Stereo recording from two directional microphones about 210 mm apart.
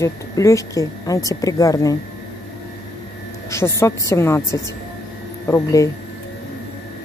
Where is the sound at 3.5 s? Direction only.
15° left (ahead or behind).